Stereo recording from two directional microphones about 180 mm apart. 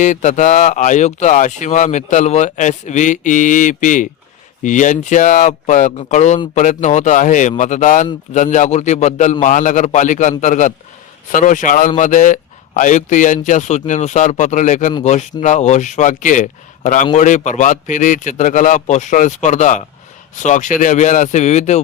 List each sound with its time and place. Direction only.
0.0 s speech: 45° left (ahead or behind)